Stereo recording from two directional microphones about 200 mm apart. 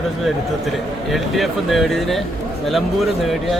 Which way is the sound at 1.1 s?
Centre (ahead or behind).